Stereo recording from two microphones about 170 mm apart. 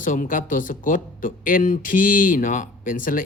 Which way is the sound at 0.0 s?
50° left (ahead or behind).